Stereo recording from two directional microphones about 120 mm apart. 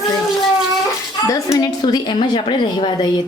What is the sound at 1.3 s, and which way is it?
A woman's voice, 25° left (ahead or behind).